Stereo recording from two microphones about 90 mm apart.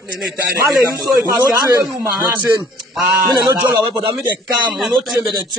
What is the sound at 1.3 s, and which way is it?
Speech, 40° right (ahead or behind).